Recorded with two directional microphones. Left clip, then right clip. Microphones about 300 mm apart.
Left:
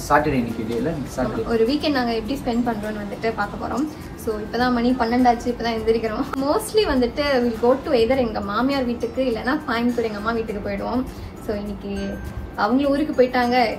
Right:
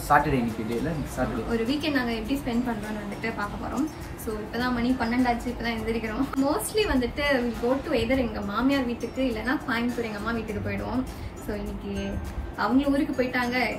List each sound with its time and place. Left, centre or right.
0.1 s speech: centre
1.1 s a woman's voice: centre
12.5 s a woman's voice: centre